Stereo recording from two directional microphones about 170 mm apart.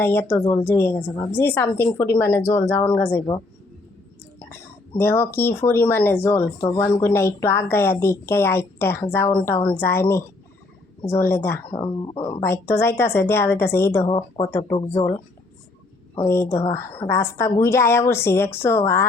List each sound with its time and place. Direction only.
0.0 s a woman's voice: 15° left (ahead or behind)
4.9 s a woman's voice: 10° left (ahead or behind)
11.8 s speech: 30° left (ahead or behind)
12.4 s a woman's voice: 15° left (ahead or behind)
14.0 s speech: 30° left (ahead or behind)
14.8 s a woman's voice: 15° left (ahead or behind)
16.2 s a woman's voice: 15° left (ahead or behind)